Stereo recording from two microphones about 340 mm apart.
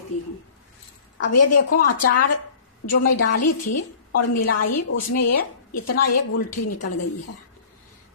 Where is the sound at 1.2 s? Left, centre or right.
Left.